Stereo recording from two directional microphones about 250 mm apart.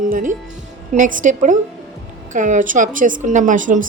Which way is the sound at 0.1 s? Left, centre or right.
Right.